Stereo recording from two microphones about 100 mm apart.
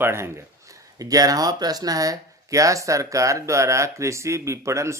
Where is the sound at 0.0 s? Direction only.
25° right (ahead or behind).